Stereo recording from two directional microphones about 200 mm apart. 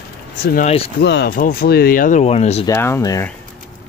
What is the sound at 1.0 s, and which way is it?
Speech, 60° left (ahead or behind).